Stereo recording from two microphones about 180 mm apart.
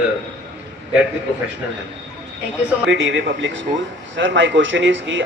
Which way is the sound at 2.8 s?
90° right.